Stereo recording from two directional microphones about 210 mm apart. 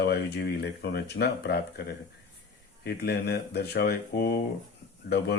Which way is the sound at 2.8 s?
50° left (ahead or behind).